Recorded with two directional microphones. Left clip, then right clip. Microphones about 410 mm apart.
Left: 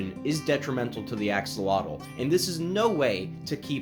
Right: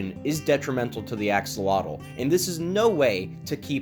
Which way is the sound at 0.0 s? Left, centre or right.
Centre.